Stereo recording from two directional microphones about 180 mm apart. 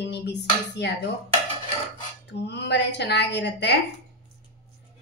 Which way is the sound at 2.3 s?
70° left (ahead or behind).